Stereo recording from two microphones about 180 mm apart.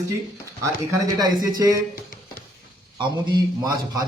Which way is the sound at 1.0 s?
20° right (ahead or behind).